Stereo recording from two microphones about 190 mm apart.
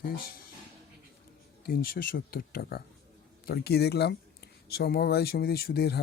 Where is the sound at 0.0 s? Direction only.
50° left (ahead or behind).